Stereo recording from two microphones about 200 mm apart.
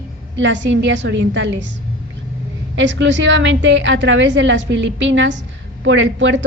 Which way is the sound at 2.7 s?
65° right (ahead or behind).